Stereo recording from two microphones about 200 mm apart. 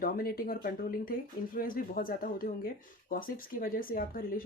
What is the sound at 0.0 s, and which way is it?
Speech, 45° left (ahead or behind).